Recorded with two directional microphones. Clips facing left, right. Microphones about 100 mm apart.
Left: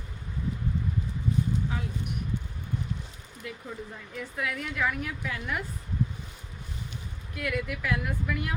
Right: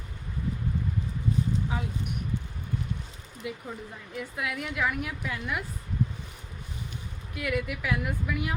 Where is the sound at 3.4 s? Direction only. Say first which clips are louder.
Right 2 dB; 15° right (ahead or behind).